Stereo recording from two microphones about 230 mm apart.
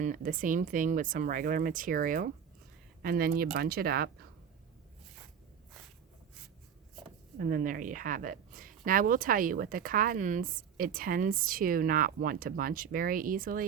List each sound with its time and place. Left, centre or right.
0.0 s a woman's voice: right
7.3 s a woman's voice: right